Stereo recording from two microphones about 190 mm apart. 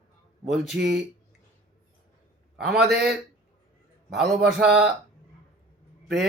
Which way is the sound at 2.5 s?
Centre (ahead or behind).